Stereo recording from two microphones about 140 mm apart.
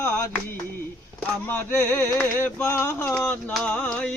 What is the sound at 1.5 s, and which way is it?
Speech, 15° left (ahead or behind).